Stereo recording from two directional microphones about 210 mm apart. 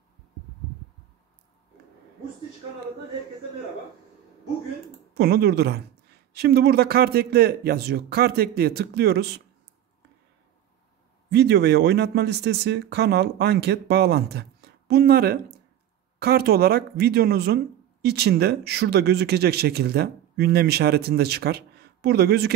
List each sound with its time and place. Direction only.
5.1 s speech: 50° right (ahead or behind)
11.2 s speech: 55° right (ahead or behind)